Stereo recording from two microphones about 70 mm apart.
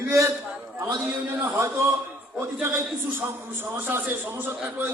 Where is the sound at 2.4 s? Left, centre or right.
Right.